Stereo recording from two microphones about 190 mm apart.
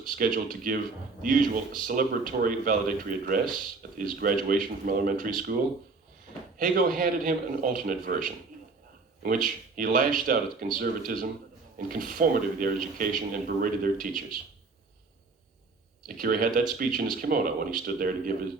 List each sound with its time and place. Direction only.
0.0 s speech: 45° right (ahead or behind)
6.6 s speech: 50° right (ahead or behind)
16.0 s speech: 50° right (ahead or behind)